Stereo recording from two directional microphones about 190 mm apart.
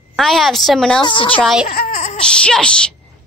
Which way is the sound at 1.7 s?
50° left (ahead or behind).